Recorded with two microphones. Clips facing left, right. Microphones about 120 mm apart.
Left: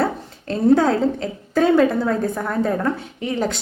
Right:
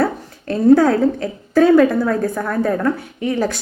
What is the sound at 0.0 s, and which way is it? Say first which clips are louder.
A woman's voice: right 3 dB; 25° left (ahead or behind).